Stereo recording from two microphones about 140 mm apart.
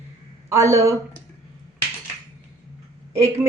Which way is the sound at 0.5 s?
20° right (ahead or behind).